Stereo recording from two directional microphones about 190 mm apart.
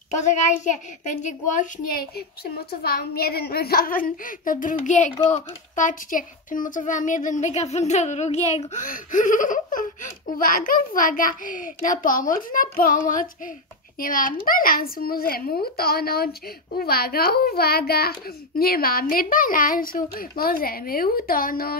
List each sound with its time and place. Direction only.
0.1 s a woman's voice: 40° left (ahead or behind)